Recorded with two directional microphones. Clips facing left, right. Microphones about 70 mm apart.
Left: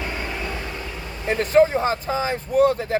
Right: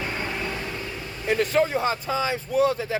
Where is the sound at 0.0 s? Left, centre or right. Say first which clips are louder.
Left 1 dB; centre.